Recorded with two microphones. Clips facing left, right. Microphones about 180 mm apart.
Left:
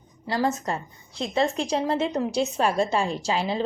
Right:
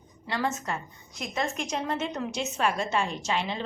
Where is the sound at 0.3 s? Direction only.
35° left (ahead or behind).